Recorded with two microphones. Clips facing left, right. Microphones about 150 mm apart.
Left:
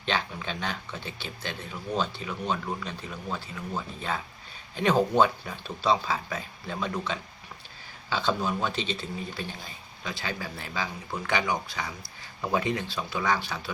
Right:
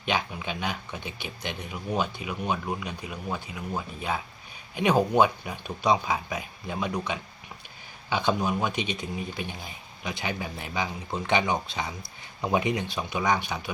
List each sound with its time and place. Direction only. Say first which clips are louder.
0.0 s speech: right 1 dB; 10° right (ahead or behind)